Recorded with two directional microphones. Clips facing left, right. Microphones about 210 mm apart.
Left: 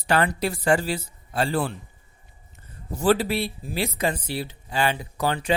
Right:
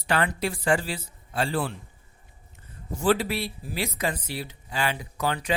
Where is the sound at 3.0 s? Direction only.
35° left (ahead or behind).